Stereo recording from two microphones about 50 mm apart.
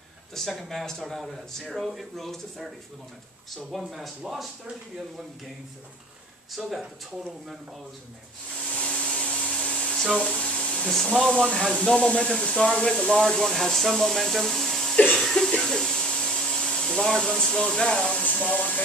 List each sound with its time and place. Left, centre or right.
0.3 s a man's voice: centre
6.5 s a man's voice: centre
8.6 s vacuum cleaner: centre
10.1 s a sound: centre
10.9 s a man's voice: centre
15.3 s speech: centre
18.2 s speech: left